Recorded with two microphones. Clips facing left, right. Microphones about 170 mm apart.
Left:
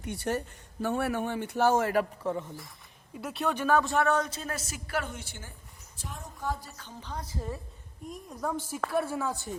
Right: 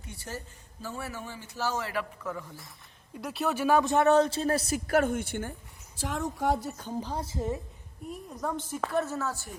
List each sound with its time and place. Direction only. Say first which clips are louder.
0.0 s speech: left 9 dB; 65° left (ahead or behind); by 2.0 s 45° left (ahead or behind)
2.2 s speech: left 5 dB; 25° left (ahead or behind)
3.1 s speech: right 1 dB; centre (ahead or behind); by 5.5 s 60° right (ahead or behind)
6.0 s a woman's voice: right 9 dB; 80° right
6.7 s a woman's voice: right 7 dB; 40° right (ahead or behind); by 7.6 s 25° right (ahead or behind)
8.1 s a woman's voice: even; centre (ahead or behind); by 9.5 s 15° left (ahead or behind)